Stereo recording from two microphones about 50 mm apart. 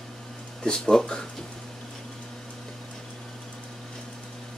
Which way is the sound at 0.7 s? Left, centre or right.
Centre.